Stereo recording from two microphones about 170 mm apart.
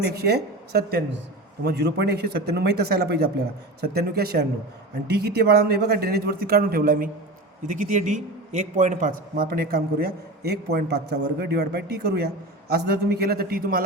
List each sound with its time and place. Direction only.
0.0 s a man's voice: 70° right (ahead or behind)